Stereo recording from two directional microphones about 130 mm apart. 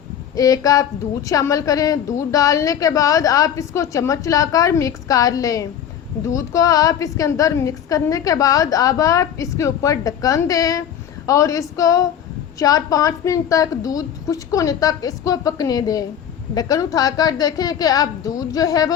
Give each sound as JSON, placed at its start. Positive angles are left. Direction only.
{"t": 0.3, "sound": "a woman's voice", "side_deg": 25}